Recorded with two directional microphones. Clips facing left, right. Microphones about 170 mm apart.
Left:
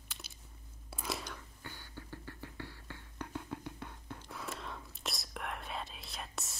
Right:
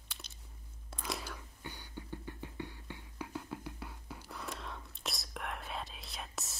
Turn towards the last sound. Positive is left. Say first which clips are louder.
# even
turn(degrees=0)  # may be behind; listen again after turning